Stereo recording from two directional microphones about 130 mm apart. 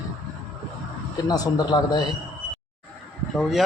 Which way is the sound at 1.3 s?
30° left (ahead or behind).